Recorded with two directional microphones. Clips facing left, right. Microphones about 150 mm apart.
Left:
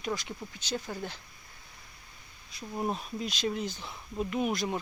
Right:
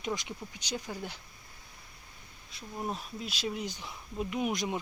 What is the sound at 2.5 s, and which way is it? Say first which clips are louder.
Speech: left 4 dB; centre (ahead or behind).